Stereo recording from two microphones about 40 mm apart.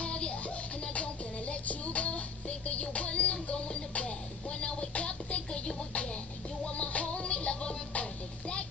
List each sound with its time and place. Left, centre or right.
0.0 s music: left